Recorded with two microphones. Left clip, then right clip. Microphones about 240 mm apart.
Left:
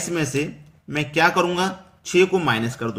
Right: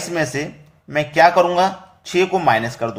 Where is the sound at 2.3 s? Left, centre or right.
Centre.